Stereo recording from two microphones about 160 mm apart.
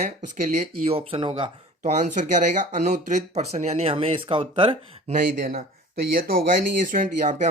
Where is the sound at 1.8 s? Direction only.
50° right (ahead or behind).